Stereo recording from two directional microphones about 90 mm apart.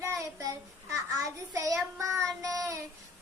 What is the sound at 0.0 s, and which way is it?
Child singing, 35° right (ahead or behind).